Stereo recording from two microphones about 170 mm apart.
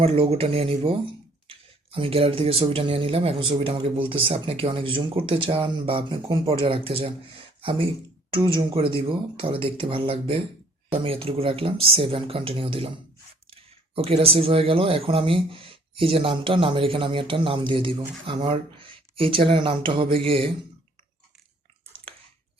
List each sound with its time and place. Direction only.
0.0 s speech: 35° right (ahead or behind)